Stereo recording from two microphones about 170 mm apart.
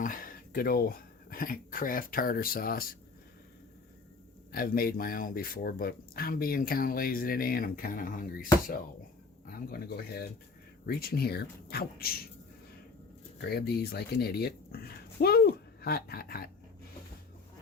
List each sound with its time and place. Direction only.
0.0 s speech: 55° left (ahead or behind)
4.5 s speech: 60° left (ahead or behind)
9.5 s speech: 60° left (ahead or behind)
13.4 s speech: 70° left (ahead or behind)